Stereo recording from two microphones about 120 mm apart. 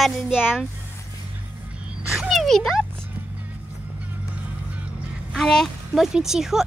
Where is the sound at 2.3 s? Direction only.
Centre (ahead or behind).